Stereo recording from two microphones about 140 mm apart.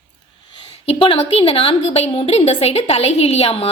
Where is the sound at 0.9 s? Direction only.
40° left (ahead or behind).